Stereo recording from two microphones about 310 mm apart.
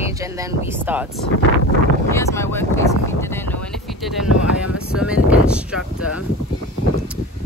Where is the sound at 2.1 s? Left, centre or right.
Centre.